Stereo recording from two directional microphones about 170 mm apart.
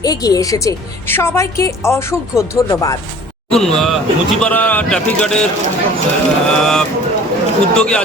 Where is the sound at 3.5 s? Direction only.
5° left (ahead or behind).